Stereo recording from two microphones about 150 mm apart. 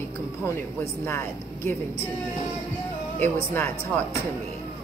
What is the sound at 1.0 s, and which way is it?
Speech, 20° left (ahead or behind).